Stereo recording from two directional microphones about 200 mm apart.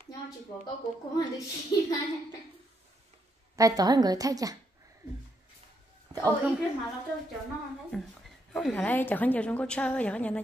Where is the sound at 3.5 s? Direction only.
15° right (ahead or behind).